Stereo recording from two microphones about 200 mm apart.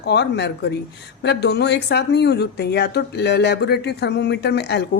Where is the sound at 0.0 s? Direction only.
55° left (ahead or behind).